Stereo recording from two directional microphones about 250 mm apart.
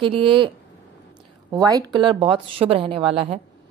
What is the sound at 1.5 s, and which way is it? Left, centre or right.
A woman's voice, centre.